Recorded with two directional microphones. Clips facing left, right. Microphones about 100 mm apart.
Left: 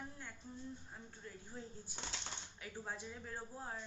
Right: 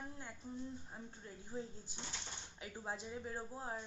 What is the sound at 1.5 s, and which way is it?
A woman's voice, 20° right (ahead or behind).